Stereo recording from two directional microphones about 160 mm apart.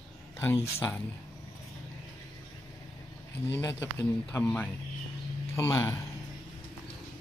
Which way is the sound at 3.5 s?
15° left (ahead or behind).